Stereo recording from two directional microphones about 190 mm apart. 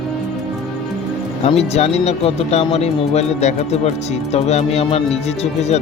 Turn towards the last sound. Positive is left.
turn(degrees=35)  # may be behind; listen again after turning